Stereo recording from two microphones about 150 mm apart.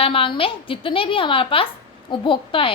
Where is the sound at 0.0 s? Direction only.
35° left (ahead or behind).